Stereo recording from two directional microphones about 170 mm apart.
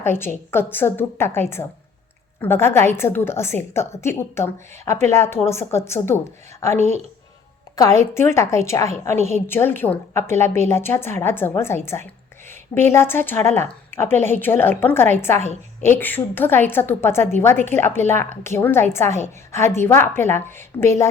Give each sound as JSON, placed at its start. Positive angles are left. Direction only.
{"t": 0.0, "sound": "a woman's voice", "side_deg": 15}
{"t": 7.8, "sound": "a woman's voice", "side_deg": 15}